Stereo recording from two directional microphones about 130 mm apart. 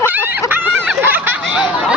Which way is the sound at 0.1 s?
15° right (ahead or behind).